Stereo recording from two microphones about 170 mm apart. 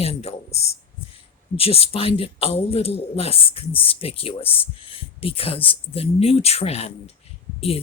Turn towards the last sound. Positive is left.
turn(degrees=35)  # may be behind; listen again after turning